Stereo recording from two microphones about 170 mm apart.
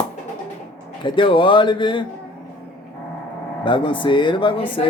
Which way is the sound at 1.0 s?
30° left (ahead or behind).